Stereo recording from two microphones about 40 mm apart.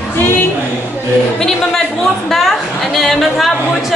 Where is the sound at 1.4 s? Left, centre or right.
Centre.